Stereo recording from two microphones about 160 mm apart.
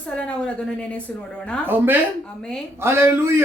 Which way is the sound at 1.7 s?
10° right (ahead or behind).